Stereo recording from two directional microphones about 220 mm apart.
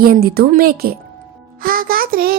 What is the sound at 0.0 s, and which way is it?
A woman's voice, 40° right (ahead or behind).